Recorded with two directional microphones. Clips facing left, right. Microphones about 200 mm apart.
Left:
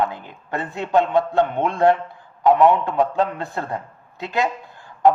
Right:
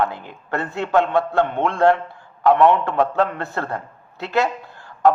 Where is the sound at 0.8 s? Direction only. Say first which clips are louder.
Even; 20° left (ahead or behind).